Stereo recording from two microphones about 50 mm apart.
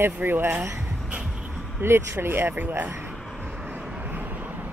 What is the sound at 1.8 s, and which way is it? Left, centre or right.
Speech, right.